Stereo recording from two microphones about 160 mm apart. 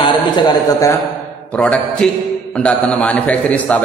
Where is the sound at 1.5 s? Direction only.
5° left (ahead or behind).